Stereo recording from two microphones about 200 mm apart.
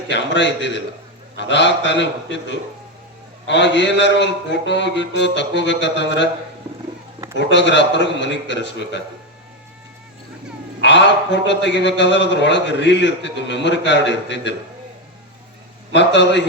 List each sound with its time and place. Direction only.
0.1 s a man's voice: 65° left (ahead or behind)
7.5 s a man's voice: 60° left (ahead or behind)
10.8 s a man's voice: 60° left (ahead or behind)
16.0 s a man's voice: 60° left (ahead or behind)